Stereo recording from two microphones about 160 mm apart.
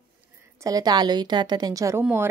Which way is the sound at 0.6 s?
20° right (ahead or behind).